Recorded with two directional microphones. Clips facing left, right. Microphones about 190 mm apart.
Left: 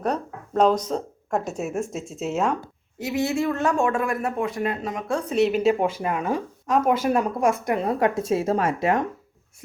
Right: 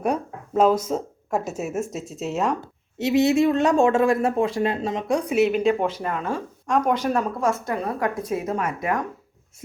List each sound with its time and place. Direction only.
0.0 s speech: 10° right (ahead or behind)
2.6 s speech: 20° right (ahead or behind)
5.4 s a woman's voice: centre (ahead or behind); by 9.0 s 25° left (ahead or behind)